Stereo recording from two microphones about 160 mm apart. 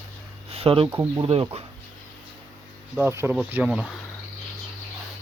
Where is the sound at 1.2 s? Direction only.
35° right (ahead or behind).